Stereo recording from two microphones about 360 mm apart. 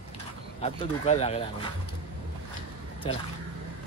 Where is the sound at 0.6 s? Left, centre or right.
Centre.